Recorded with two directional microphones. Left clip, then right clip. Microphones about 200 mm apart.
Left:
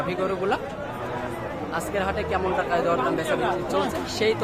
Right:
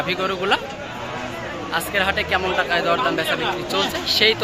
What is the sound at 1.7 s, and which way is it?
Speech, centre (ahead or behind).